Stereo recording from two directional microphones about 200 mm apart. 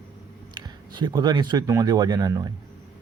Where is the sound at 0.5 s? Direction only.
20° right (ahead or behind).